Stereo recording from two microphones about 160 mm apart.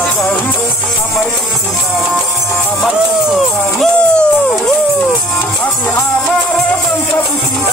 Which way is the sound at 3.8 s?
5° left (ahead or behind).